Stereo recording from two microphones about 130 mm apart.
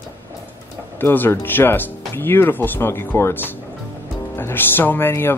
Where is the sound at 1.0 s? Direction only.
15° left (ahead or behind).